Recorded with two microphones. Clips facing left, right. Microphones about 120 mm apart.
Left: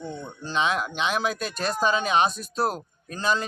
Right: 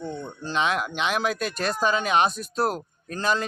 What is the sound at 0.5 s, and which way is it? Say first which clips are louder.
Speech: even; 25° left (ahead or behind).